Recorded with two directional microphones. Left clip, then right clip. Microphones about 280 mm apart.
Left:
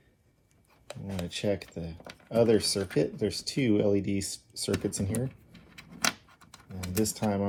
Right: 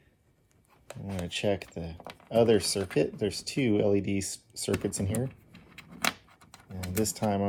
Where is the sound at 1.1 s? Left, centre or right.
Centre.